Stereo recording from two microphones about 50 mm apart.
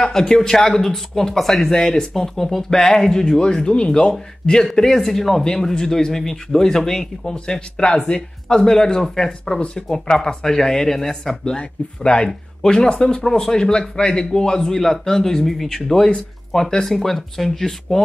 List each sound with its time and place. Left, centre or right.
0.0 s a man's voice: centre